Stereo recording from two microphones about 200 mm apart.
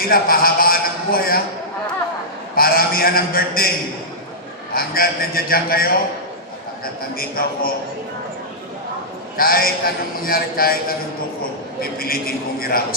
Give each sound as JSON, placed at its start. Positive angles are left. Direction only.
{"t": 0.0, "sound": "a man's voice", "side_deg": 50}
{"t": 2.6, "sound": "a man's voice", "side_deg": 50}
{"t": 4.7, "sound": "a man's voice", "side_deg": 50}
{"t": 9.4, "sound": "a man's voice", "side_deg": 50}